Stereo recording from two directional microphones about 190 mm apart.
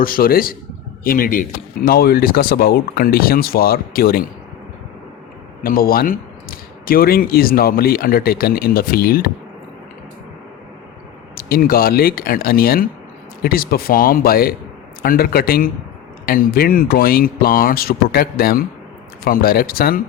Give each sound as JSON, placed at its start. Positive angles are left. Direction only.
{"t": 0.0, "sound": "speech", "side_deg": 50}
{"t": 5.6, "sound": "speech", "side_deg": 50}
{"t": 11.3, "sound": "speech", "side_deg": 50}